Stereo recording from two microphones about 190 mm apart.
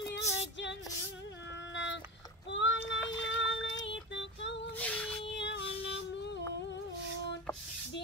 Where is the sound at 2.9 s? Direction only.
70° left (ahead or behind).